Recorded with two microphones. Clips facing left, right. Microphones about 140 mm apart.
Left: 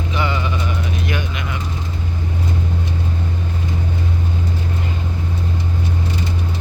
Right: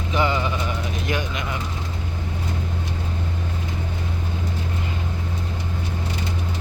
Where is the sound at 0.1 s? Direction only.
40° right (ahead or behind).